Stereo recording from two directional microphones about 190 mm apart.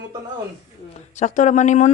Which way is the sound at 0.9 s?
40° left (ahead or behind).